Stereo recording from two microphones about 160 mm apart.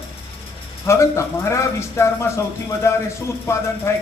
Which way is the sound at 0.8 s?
15° left (ahead or behind).